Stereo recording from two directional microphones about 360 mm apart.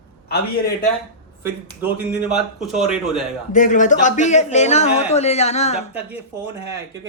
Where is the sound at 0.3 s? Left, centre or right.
Left.